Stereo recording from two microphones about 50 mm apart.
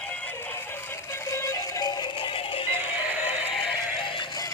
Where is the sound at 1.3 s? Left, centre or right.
Left.